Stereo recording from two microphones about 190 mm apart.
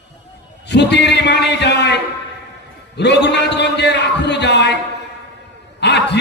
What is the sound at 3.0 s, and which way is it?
A man's voice, 65° left (ahead or behind).